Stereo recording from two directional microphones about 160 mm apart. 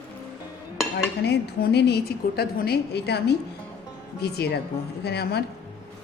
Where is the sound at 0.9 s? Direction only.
90° left.